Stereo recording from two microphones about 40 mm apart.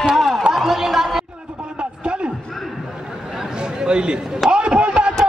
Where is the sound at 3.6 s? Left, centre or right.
Right.